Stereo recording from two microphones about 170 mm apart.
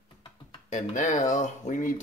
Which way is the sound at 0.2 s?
45° left (ahead or behind).